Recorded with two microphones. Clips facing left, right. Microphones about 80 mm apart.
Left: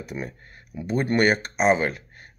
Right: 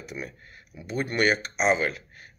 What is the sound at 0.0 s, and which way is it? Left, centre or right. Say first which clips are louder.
Speech: left 4 dB; left.